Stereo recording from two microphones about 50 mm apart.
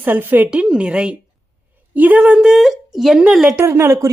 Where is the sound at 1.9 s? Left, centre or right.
Right.